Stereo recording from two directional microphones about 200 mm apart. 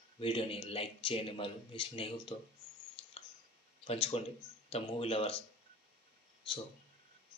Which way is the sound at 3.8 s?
30° left (ahead or behind).